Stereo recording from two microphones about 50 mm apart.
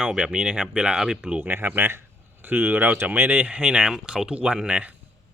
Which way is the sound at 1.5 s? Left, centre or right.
Right.